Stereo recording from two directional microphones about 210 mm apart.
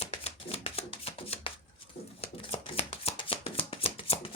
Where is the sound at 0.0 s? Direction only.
30° left (ahead or behind).